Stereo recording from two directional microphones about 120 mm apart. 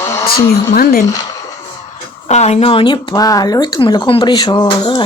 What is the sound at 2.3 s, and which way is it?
Speech, 65° left (ahead or behind).